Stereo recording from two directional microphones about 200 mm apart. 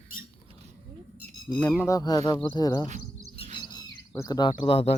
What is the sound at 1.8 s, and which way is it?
Speech, 20° left (ahead or behind).